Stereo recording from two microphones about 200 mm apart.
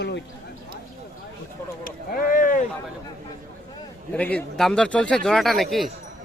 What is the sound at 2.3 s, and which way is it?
Speech, 40° left (ahead or behind).